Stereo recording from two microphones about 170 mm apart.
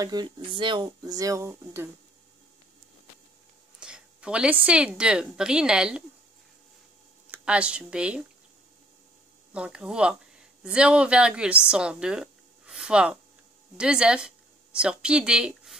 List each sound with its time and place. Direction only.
0.0 s speech: 25° right (ahead or behind)
3.8 s speech: 5° right (ahead or behind)
7.2 s speech: 5° right (ahead or behind)
9.5 s a woman's voice: 5° right (ahead or behind)